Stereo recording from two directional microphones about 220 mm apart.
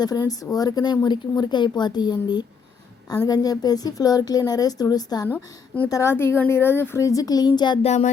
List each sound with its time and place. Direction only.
0.0 s a woman's voice: 20° left (ahead or behind)